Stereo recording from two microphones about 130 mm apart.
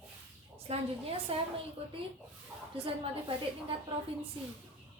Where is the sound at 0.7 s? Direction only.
50° right (ahead or behind).